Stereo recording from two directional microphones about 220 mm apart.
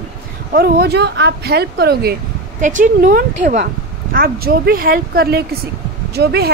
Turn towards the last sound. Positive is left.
turn(degrees=-45)  # may be behind; listen again after turning